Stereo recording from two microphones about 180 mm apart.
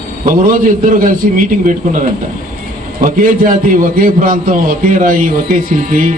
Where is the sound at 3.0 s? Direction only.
50° right (ahead or behind).